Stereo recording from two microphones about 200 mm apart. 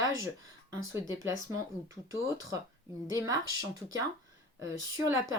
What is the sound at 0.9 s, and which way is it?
Speech, 15° right (ahead or behind).